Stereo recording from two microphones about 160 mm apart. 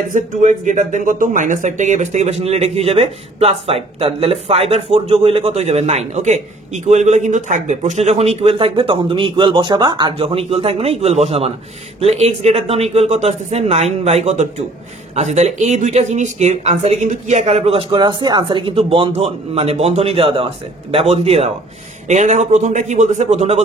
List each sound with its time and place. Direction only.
0.1 s speech: 50° right (ahead or behind)